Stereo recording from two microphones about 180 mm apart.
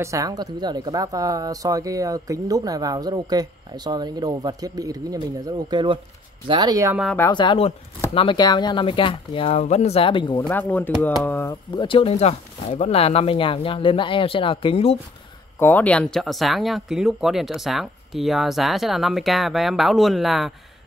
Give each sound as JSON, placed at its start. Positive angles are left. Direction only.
{"t": 0.0, "sound": "speech", "side_deg": -20}
{"t": 7.2, "sound": "speech", "side_deg": 25}
{"t": 10.5, "sound": "speech", "side_deg": 10}
{"t": 11.7, "sound": "speech", "side_deg": 25}
{"t": 15.6, "sound": "speech", "side_deg": 10}